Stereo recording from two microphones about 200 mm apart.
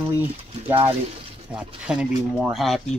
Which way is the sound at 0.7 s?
25° right (ahead or behind).